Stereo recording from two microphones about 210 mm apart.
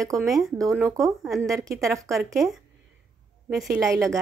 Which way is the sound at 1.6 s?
15° right (ahead or behind).